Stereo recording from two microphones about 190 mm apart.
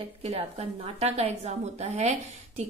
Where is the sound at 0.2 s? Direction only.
35° right (ahead or behind).